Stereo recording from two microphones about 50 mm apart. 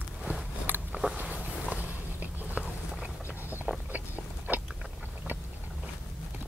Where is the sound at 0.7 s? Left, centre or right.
Right.